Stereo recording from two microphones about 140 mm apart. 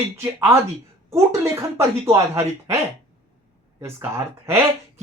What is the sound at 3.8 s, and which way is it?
Speech, 20° right (ahead or behind).